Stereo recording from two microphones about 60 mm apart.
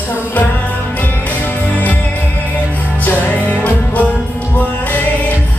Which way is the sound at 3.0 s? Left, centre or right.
Left.